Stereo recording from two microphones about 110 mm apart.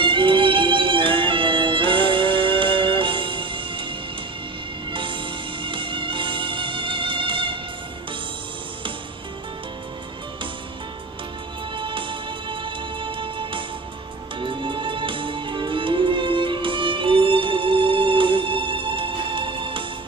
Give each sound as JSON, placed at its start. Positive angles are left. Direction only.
{"t": 0.0, "sound": "music", "side_deg": -50}
{"t": 4.9, "sound": "music", "side_deg": -50}
{"t": 11.7, "sound": "music", "side_deg": -50}